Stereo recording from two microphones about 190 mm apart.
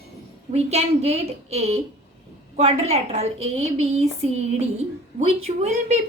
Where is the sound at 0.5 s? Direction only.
35° right (ahead or behind).